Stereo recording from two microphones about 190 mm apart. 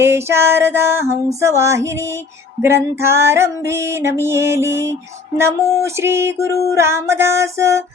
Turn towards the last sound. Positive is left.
turn(degrees=-15)  # may be behind; listen again after turning